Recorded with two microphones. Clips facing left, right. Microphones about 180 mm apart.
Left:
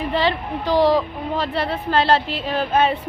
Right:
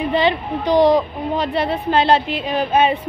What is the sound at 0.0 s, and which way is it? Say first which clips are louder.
A woman's voice: right 3 dB; 20° right (ahead or behind).